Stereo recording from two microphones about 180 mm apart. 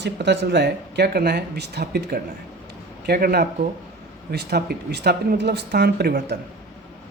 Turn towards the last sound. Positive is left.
turn(degrees=-60)  # may be behind; listen again after turning